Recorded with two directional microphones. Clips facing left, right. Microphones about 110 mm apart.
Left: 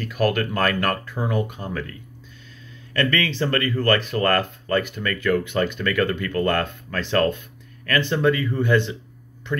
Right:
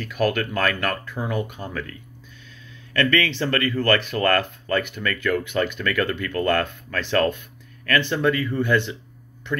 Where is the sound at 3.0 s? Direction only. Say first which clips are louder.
Right 1 dB; 20° left (ahead or behind).